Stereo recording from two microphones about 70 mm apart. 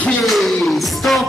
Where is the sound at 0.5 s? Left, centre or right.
Centre.